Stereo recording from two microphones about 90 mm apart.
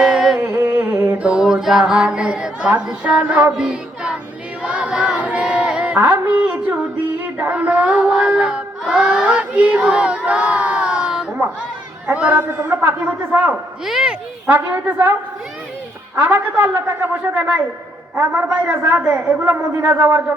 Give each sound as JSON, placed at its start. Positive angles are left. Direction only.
{"t": 0.0, "sound": "humming", "side_deg": -10}
{"t": 0.4, "sound": "music", "side_deg": -25}
{"t": 1.3, "sound": "a sound", "side_deg": -10}
{"t": 3.5, "sound": "music", "side_deg": -10}
{"t": 4.6, "sound": "a sound", "side_deg": -10}
{"t": 13.3, "sound": "a woman's voice", "side_deg": -20}
{"t": 13.8, "sound": "a sound", "side_deg": -5}
{"t": 14.4, "sound": "a woman's voice", "side_deg": -20}
{"t": 16.2, "sound": "a woman's voice", "side_deg": -20}
{"t": 18.9, "sound": "a woman's voice", "side_deg": -20}